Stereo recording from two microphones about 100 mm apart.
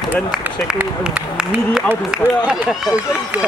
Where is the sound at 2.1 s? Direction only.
10° right (ahead or behind).